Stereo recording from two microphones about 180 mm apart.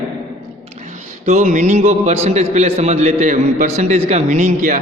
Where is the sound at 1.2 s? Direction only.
40° right (ahead or behind).